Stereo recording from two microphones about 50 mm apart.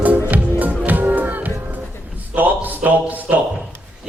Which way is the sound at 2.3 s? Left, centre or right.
Right.